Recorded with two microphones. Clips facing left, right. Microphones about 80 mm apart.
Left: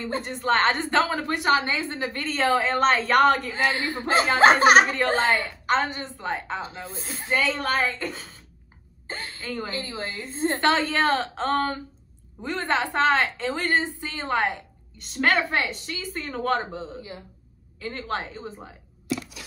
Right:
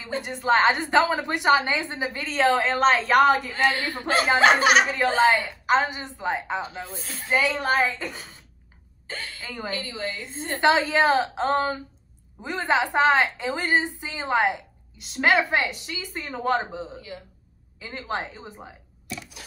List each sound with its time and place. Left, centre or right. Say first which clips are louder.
0.0 s a woman's voice: even; centre
1.2 s a woman's voice: right 2 dB; centre
2.1 s a woman's voice: right 2 dB; centre
3.5 s a man's voice: right 1 dB; left
4.4 s a woman's voice: left 3 dB; left
5.4 s a woman's voice: right 2 dB; centre
9.0 s a sound: even; left
9.5 s a woman's voice: left 1 dB; centre
9.8 s a woman's voice: even; left
10.6 s a woman's voice: right 4 dB; centre